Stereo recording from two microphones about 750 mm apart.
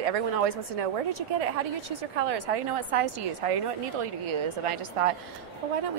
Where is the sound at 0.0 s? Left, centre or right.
Right.